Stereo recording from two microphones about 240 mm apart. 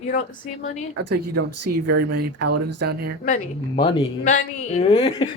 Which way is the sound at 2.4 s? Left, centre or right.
Right.